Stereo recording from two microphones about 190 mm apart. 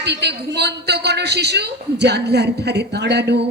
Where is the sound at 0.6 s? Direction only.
60° right (ahead or behind).